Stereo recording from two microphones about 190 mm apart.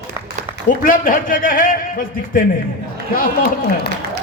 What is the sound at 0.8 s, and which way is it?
Speech, 45° left (ahead or behind).